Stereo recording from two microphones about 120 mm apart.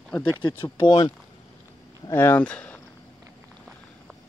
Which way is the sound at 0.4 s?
45° left (ahead or behind).